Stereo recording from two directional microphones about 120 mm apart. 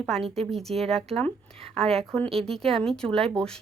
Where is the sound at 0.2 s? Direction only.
55° right (ahead or behind).